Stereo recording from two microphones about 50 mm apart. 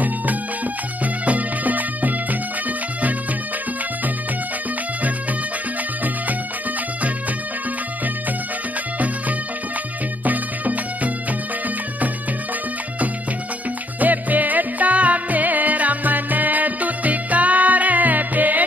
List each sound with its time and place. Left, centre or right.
1.0 s music: right
10.2 s music: right
13.9 s music: right